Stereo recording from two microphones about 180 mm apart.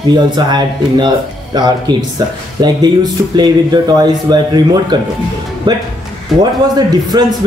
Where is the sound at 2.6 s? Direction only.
25° right (ahead or behind).